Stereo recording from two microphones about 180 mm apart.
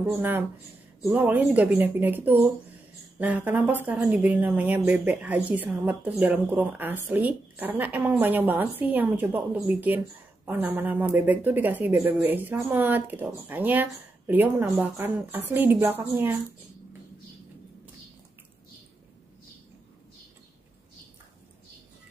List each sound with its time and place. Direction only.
0.0 s speech: 10° right (ahead or behind)